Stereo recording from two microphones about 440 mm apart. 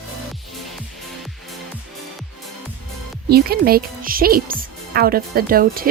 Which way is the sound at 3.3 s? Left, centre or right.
Right.